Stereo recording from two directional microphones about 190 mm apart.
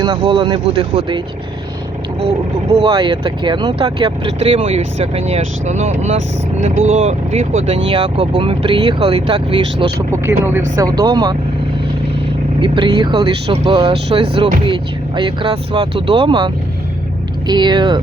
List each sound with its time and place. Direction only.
0.0 s speech: 20° right (ahead or behind)
2.7 s speech: 25° right (ahead or behind)
10.1 s speech: 10° right (ahead or behind)
12.5 s speech: 25° right (ahead or behind)